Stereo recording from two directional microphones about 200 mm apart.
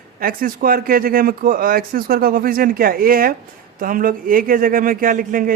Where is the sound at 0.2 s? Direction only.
45° right (ahead or behind).